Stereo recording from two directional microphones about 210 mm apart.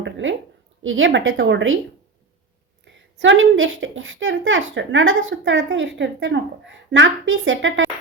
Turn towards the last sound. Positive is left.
turn(degrees=-65)  # may be behind; listen again after turning